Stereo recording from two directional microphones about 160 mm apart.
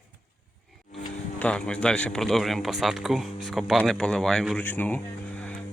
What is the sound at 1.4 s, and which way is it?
Speech, 5° left (ahead or behind).